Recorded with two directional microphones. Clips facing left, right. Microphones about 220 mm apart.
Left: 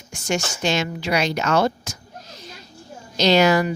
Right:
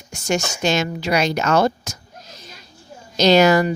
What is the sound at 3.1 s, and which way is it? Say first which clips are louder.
Speech: right 3 dB; 45° right (ahead or behind).